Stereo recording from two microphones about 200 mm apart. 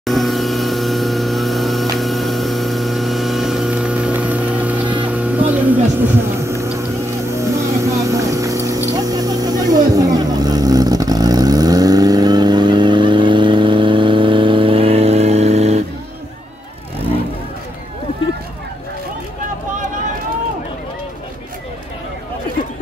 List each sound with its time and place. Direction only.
0.0 s vehicle: centre (ahead or behind); by 15.8 s 30° right (ahead or behind)